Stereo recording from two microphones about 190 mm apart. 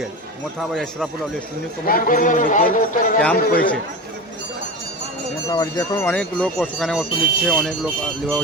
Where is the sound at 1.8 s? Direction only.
50° left (ahead or behind).